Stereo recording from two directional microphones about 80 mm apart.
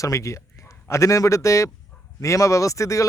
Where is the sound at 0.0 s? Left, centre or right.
Left.